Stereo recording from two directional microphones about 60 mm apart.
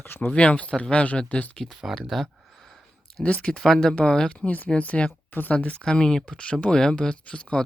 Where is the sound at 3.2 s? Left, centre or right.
Left.